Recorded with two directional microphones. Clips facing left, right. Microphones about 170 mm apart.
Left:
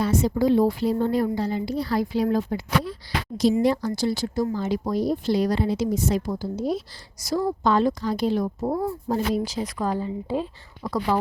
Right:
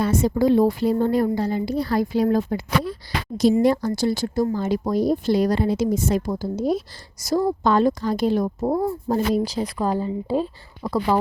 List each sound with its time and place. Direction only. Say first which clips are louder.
0.0 s speech: right 2 dB; 50° right (ahead or behind); by 11.2 s 30° right (ahead or behind)